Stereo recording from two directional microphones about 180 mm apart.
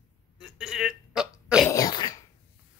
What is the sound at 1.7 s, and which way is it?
Throat clearing, 20° left (ahead or behind).